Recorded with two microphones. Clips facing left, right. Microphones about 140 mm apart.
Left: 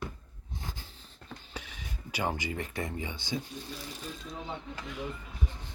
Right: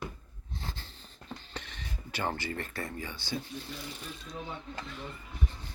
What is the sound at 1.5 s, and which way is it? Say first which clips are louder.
Speech: even; 10° left (ahead or behind).